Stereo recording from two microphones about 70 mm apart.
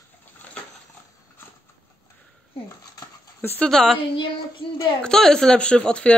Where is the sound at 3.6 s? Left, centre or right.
Centre.